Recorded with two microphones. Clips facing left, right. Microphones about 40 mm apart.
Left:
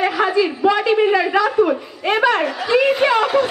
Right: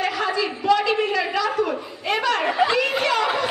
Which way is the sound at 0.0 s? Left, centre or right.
Left.